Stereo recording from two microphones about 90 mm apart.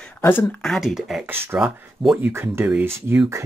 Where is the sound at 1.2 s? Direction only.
25° right (ahead or behind).